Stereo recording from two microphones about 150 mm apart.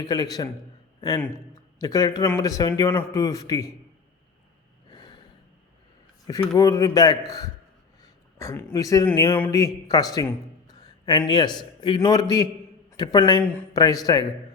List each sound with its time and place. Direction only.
0.0 s speech: 25° left (ahead or behind)
1.5 s speech: 25° left (ahead or behind)
4.9 s gasp: 30° left (ahead or behind)
6.6 s speech: 25° left (ahead or behind)
10.7 s a sound: 30° left (ahead or behind)
11.2 s a man's voice: 30° left (ahead or behind)
13.4 s speech: 15° left (ahead or behind)
13.7 s speech: 25° left (ahead or behind)